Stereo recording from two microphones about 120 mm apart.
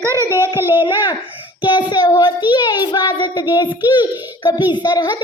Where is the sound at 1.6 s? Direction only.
40° left (ahead or behind).